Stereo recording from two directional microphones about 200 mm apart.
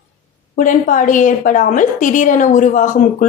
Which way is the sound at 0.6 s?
40° left (ahead or behind).